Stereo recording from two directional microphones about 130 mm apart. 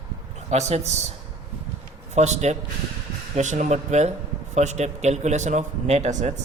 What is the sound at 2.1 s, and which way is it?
A man's voice, 60° right (ahead or behind).